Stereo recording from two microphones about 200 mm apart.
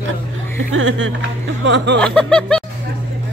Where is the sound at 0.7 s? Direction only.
75° right (ahead or behind).